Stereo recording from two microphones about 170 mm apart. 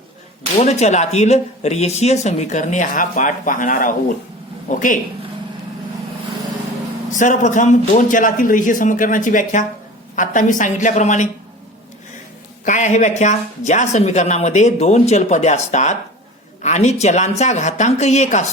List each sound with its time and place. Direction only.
0.6 s speech: 40° left (ahead or behind)
7.1 s speech: 50° left (ahead or behind)
12.6 s speech: 45° left (ahead or behind)